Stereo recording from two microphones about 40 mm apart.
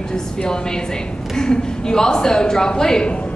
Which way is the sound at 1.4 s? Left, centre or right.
Centre.